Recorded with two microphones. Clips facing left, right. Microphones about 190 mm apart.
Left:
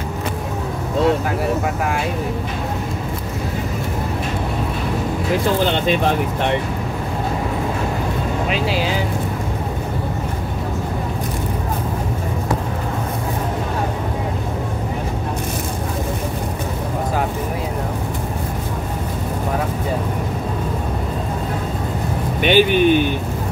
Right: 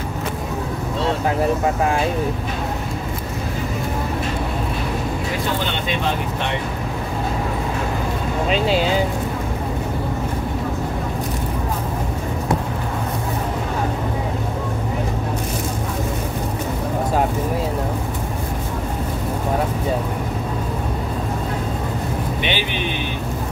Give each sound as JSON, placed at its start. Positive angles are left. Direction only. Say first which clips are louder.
{"t": 22.4, "sound": "speech", "louder": "left 15 dB", "side_deg": 45}